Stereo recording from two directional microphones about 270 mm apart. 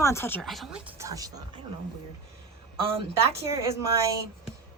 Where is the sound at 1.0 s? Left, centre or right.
Centre.